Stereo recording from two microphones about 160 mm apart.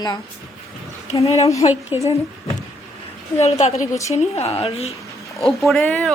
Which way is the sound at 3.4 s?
40° left (ahead or behind).